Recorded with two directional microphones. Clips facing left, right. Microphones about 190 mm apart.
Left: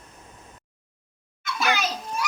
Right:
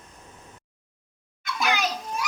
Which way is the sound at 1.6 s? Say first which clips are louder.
Left 1 dB; 15° right (ahead or behind).